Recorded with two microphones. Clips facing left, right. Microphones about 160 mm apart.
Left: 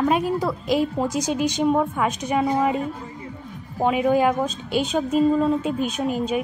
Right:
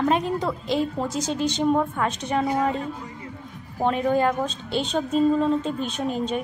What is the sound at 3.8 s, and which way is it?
Speech, 10° left (ahead or behind).